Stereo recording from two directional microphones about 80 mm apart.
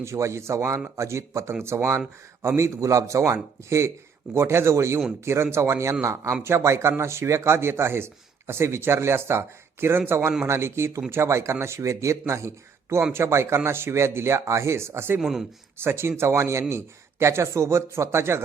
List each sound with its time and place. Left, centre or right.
0.0 s speech: right
15.2 s speech: centre
15.8 s speech: right